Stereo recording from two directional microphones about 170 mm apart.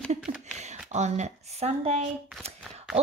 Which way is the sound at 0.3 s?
30° right (ahead or behind).